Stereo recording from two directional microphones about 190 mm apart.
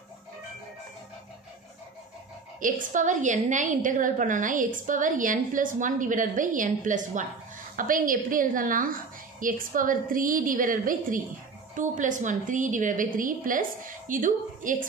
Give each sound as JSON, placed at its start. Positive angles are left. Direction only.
{"t": 2.6, "sound": "a woman's voice", "side_deg": -45}